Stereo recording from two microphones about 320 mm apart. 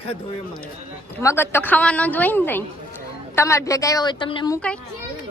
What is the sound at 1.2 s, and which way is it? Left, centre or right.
A woman's voice, centre.